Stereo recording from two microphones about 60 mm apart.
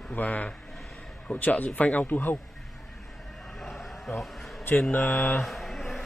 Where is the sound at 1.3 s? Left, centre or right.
Left.